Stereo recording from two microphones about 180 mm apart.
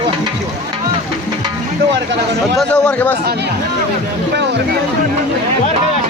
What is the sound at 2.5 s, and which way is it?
Speech, 5° left (ahead or behind).